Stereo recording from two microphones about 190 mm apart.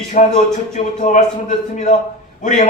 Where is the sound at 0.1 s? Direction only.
40° left (ahead or behind).